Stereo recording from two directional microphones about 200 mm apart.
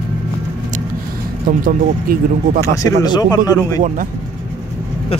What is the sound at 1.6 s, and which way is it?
Speech, 45° right (ahead or behind).